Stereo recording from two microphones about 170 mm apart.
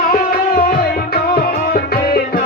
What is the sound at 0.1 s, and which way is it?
Music, 60° left (ahead or behind).